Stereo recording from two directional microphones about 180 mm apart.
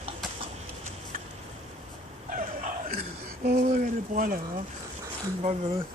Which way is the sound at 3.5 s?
45° right (ahead or behind).